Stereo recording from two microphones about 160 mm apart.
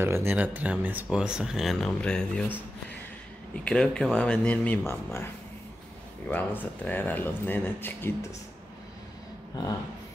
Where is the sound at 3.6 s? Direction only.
5° left (ahead or behind).